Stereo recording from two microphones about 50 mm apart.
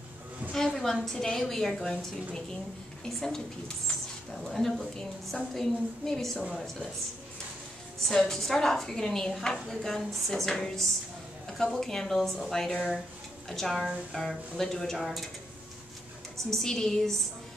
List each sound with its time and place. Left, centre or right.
0.7 s a sound: centre
1.0 s a woman's voice: centre
3.1 s a woman's voice: centre
8.0 s a woman's voice: centre
16.4 s a woman's voice: centre